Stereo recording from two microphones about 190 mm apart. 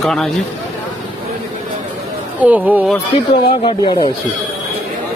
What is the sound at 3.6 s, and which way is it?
Speech, 25° left (ahead or behind).